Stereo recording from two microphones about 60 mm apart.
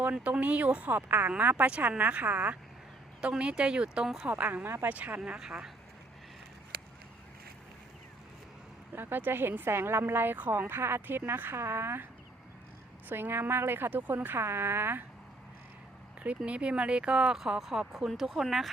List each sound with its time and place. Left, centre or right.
0.0 s speech: right
3.2 s speech: centre
4.3 s speech: right
4.9 s speech: right
5.4 s speech: centre
9.0 s speech: right
13.1 s speech: right
16.5 s speech: centre